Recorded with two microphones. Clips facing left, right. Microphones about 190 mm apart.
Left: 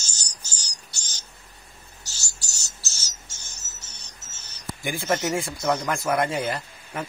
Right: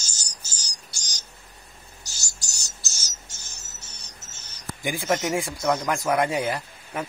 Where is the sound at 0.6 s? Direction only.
10° right (ahead or behind).